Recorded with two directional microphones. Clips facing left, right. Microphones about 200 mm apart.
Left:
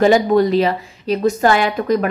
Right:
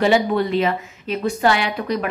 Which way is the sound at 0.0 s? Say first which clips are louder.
Left 5 dB; 40° left (ahead or behind).